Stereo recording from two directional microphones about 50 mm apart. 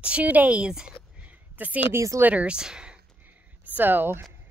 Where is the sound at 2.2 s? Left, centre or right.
Right.